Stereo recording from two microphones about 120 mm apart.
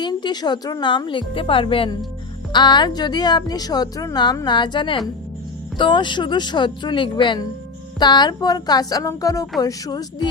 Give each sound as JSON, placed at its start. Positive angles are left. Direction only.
{"t": 0.0, "sound": "a woman's voice", "side_deg": 40}